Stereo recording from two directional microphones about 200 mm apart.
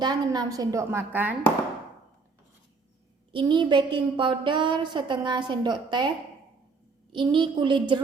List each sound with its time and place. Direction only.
0.0 s a woman's voice: 20° right (ahead or behind)
3.3 s a woman's voice: 25° right (ahead or behind)
7.1 s a woman's voice: 25° right (ahead or behind)